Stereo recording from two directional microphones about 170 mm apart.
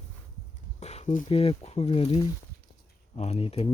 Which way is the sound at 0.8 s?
40° left (ahead or behind).